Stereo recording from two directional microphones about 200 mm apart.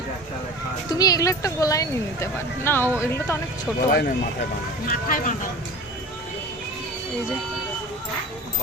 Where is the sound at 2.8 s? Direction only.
10° right (ahead or behind).